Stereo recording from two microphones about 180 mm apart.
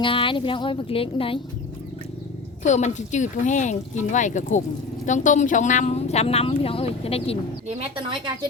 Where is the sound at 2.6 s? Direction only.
40° left (ahead or behind).